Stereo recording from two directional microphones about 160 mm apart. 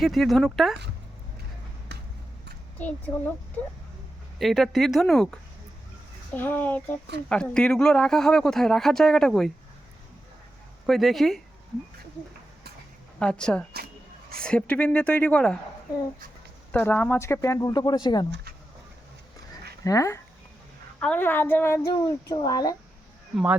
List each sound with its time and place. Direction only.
0.0 s speech: centre (ahead or behind)
1.9 s vehicle: 90° right
4.4 s speech: centre (ahead or behind)
6.3 s speech: 15° left (ahead or behind)
10.8 s speech: centre (ahead or behind)
13.1 s speech: 5° left (ahead or behind)
16.7 s speech: 10° left (ahead or behind)
19.8 s speech: 20° left (ahead or behind)
21.8 s speech: 25° left (ahead or behind)
23.3 s speech: 10° right (ahead or behind)